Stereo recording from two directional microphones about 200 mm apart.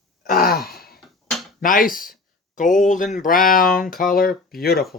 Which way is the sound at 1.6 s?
45° left (ahead or behind).